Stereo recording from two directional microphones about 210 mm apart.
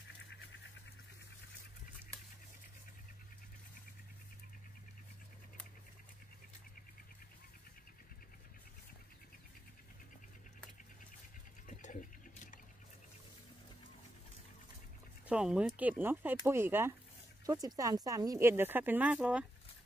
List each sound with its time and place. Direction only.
11.6 s liquid: 40° left (ahead or behind)
15.2 s speech: 5° right (ahead or behind)